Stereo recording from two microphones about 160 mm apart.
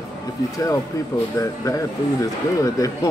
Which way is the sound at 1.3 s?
20° left (ahead or behind).